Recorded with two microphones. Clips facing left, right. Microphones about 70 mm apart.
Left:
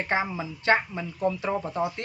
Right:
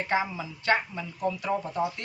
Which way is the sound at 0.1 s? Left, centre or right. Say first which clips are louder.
Even; left.